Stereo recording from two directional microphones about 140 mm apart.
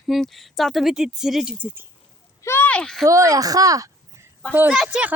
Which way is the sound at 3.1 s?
25° right (ahead or behind).